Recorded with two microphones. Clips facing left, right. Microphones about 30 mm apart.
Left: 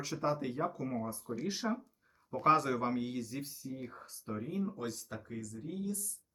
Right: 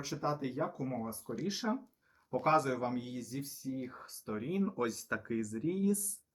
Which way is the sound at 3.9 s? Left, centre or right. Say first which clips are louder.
Right 1 dB; centre.